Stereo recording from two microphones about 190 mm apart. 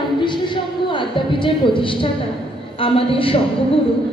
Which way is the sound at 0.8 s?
25° left (ahead or behind).